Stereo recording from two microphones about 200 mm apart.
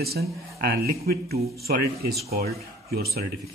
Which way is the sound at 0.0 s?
50° right (ahead or behind).